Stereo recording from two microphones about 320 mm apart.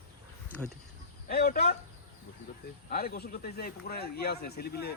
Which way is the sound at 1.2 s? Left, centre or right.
Left.